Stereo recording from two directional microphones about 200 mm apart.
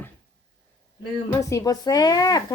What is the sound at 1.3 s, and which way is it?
Speech, 15° left (ahead or behind).